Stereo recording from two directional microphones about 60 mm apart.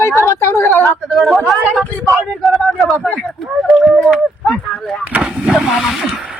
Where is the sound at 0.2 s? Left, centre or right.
Left.